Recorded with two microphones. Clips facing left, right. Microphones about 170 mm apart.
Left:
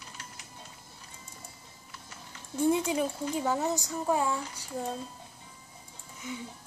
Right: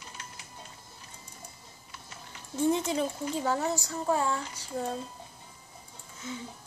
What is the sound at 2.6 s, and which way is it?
A child's voice, 10° left (ahead or behind).